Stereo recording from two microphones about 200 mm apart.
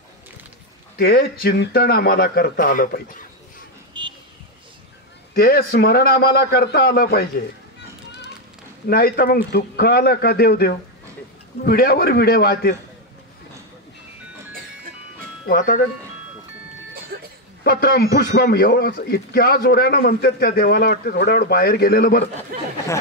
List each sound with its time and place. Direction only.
0.9 s a man's voice: 50° left (ahead or behind)
3.9 s a sound: 25° right (ahead or behind)
5.3 s a man's voice: 50° left (ahead or behind)
8.8 s a man's voice: 50° left (ahead or behind)
15.4 s a man's voice: 50° left (ahead or behind)
17.1 s music: 50° right (ahead or behind)
17.6 s a man's voice: 50° left (ahead or behind)
22.5 s speech: 45° right (ahead or behind)